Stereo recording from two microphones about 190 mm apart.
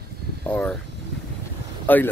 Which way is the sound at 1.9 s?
10° left (ahead or behind).